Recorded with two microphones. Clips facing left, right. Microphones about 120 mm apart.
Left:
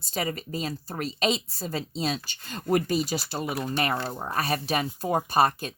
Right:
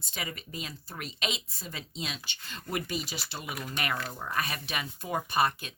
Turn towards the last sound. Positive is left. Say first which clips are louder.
# left 5 dB
turn(degrees=40)  # may be behind; listen again after turning